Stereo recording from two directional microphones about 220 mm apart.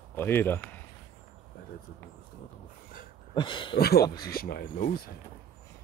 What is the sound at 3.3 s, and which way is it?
Speech, 20° left (ahead or behind).